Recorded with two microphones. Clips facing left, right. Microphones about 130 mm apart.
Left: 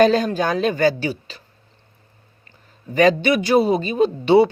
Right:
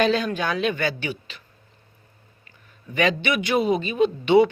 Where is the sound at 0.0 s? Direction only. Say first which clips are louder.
Left 6 dB; 40° left (ahead or behind).